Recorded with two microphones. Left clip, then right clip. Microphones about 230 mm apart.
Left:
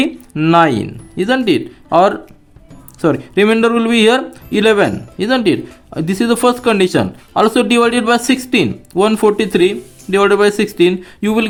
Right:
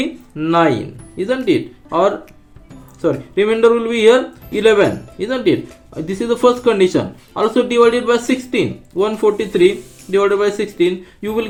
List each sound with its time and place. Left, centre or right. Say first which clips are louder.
0.0 s speech: left 5 dB; left